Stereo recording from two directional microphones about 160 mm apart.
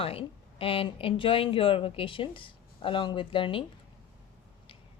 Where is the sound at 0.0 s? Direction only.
35° left (ahead or behind).